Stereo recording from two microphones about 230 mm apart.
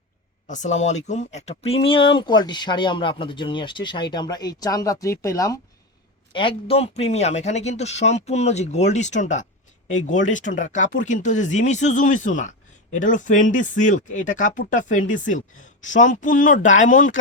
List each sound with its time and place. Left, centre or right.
0.4 s speech: left